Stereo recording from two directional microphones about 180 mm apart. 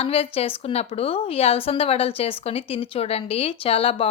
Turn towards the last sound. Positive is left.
turn(degrees=30)  # may be behind; listen again after turning